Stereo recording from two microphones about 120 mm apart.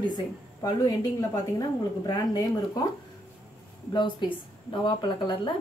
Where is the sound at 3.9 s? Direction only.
40° left (ahead or behind).